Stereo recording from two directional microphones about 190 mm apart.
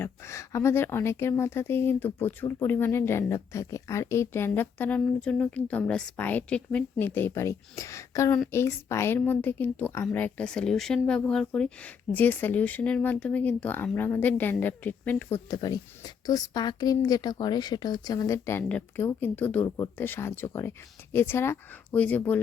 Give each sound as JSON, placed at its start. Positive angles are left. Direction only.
{"t": 0.0, "sound": "a woman's voice", "side_deg": 15}
{"t": 15.4, "sound": "a woman's voice", "side_deg": 20}